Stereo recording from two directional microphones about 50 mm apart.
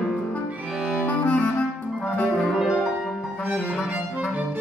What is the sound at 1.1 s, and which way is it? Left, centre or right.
Clarinet, left.